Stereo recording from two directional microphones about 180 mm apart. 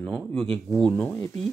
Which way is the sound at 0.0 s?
5° left (ahead or behind).